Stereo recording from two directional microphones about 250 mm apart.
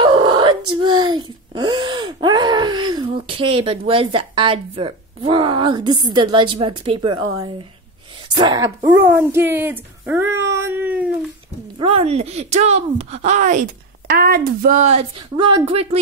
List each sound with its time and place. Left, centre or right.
0.0 s speech: centre
8.4 s speech: centre
11.8 s speech: right